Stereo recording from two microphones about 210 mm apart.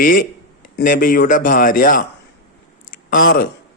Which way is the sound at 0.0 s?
40° left (ahead or behind).